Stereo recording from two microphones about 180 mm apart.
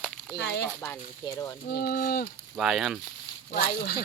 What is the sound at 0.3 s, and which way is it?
Speech, 70° left (ahead or behind).